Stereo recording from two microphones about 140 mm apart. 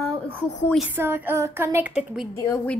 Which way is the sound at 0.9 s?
15° right (ahead or behind).